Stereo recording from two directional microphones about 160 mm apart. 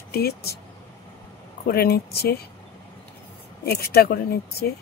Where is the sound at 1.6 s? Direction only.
75° left (ahead or behind).